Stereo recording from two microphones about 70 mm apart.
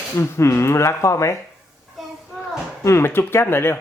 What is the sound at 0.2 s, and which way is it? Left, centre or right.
Speech, left.